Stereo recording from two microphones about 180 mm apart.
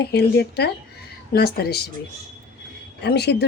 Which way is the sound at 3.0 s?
65° left (ahead or behind).